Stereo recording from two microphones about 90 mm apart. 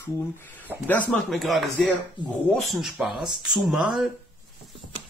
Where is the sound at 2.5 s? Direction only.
Centre (ahead or behind).